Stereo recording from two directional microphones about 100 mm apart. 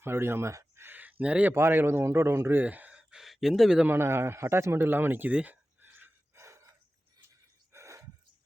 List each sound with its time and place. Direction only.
0.0 s a sound: 25° right (ahead or behind)
1.2 s speech: 15° right (ahead or behind)
1.5 s speech: 25° right (ahead or behind); by 3.8 s 5° right (ahead or behind)
3.8 s speech: 25° right (ahead or behind)
7.7 s gasp: 30° right (ahead or behind)